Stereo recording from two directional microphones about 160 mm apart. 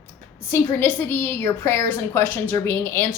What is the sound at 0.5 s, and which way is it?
A woman's voice, 15° left (ahead or behind).